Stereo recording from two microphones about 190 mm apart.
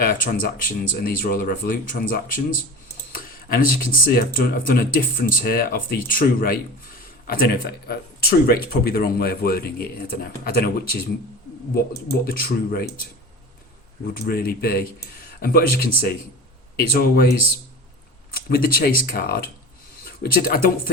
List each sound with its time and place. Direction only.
0.0 s a man's voice: 45° left (ahead or behind)
12.2 s a man's voice: 50° left (ahead or behind)
14.1 s a man's voice: 55° left (ahead or behind)